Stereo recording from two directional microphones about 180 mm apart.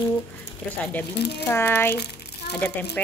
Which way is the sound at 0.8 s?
10° left (ahead or behind).